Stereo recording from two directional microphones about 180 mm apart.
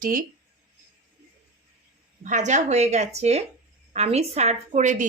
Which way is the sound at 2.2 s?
45° right (ahead or behind).